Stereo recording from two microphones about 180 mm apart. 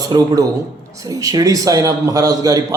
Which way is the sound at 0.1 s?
25° right (ahead or behind).